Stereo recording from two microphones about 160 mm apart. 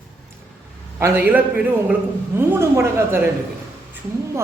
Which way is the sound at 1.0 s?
15° right (ahead or behind).